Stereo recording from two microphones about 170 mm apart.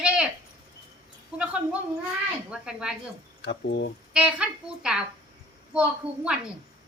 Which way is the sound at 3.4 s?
85° left.